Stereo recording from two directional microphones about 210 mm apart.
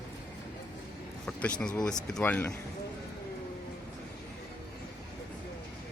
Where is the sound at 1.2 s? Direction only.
5° left (ahead or behind).